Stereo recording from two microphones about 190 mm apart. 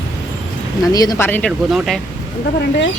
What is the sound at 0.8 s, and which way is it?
Speech, 20° left (ahead or behind).